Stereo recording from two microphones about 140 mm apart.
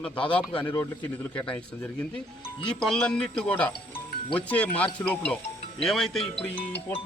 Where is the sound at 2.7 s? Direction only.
5° left (ahead or behind).